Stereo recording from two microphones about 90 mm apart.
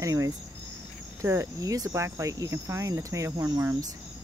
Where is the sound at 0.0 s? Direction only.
35° right (ahead or behind).